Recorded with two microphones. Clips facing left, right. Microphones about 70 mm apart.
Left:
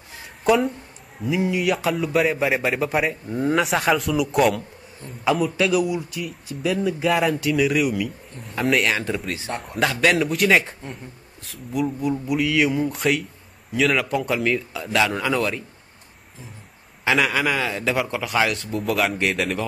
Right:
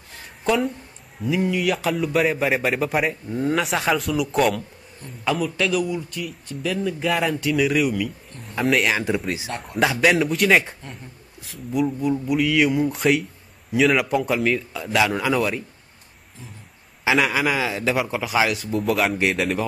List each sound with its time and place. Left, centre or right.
0.1 s a sound: centre
1.2 s speech: centre
9.6 s a man's voice: centre
17.0 s speech: centre